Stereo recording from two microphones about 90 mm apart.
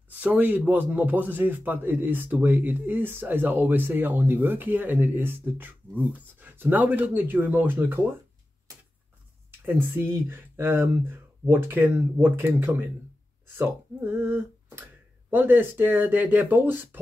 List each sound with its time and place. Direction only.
0.1 s speech: 20° right (ahead or behind)
9.7 s speech: 25° right (ahead or behind)